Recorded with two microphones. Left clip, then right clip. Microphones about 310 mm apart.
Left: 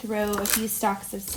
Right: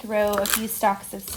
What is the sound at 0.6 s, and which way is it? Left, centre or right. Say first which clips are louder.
Speech: right 4 dB; right.